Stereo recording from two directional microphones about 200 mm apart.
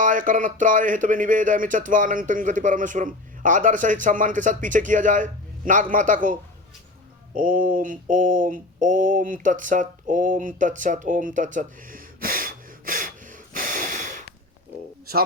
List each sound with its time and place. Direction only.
0.0 s speech: 40° right (ahead or behind)
7.3 s mantra: 40° right (ahead or behind)